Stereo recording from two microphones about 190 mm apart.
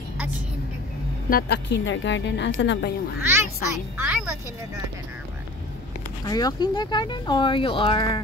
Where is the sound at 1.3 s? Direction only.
65° left (ahead or behind).